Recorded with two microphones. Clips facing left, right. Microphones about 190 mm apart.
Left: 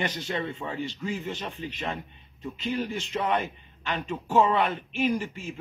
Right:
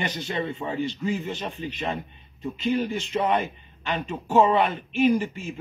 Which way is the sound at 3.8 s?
20° right (ahead or behind).